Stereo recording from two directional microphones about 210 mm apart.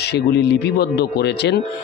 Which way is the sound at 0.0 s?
50° left (ahead or behind).